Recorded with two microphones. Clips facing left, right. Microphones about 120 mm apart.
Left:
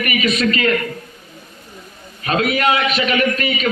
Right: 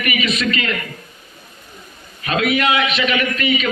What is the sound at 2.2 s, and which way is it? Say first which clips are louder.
A man's voice: left 1 dB; 35° left (ahead or behind).